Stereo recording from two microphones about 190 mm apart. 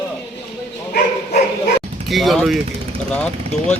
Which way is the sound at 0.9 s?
45° left (ahead or behind).